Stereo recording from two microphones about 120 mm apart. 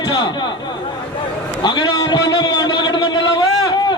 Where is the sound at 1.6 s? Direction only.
35° left (ahead or behind).